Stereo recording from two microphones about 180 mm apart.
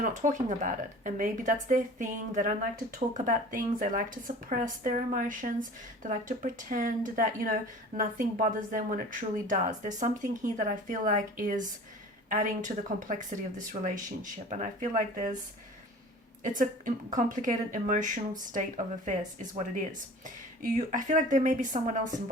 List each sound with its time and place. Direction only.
0.2 s speech: 45° right (ahead or behind)
16.4 s speech: 45° right (ahead or behind)